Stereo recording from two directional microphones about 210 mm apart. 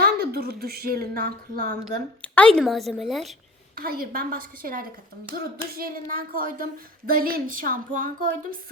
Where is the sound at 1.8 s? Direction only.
5° left (ahead or behind).